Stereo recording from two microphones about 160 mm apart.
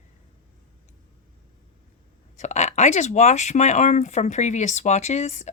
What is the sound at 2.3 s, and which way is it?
A woman's voice, 45° left (ahead or behind).